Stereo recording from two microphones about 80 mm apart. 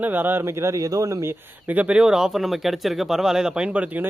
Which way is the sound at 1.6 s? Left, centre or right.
Centre.